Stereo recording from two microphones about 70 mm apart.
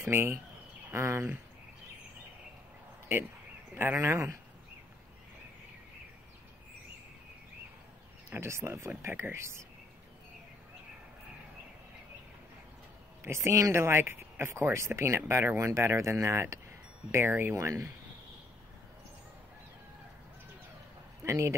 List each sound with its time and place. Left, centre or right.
0.0 s speech: right
3.7 s speech: right
8.3 s speech: right
13.2 s speech: right
17.1 s speech: right
17.6 s speech: right
21.2 s speech: right